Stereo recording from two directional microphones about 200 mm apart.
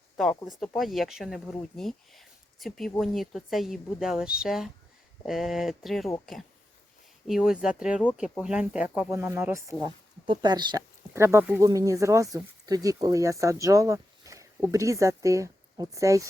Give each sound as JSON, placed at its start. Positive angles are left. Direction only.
{"t": 0.6, "sound": "speech", "side_deg": 0}
{"t": 7.3, "sound": "speech", "side_deg": -5}